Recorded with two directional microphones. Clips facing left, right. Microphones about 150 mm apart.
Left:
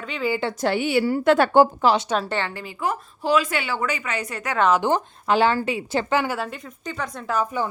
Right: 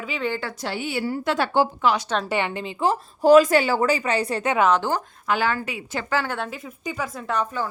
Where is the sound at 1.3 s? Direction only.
50° left (ahead or behind).